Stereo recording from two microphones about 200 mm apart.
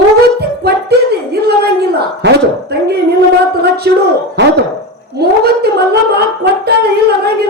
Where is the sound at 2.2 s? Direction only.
55° right (ahead or behind).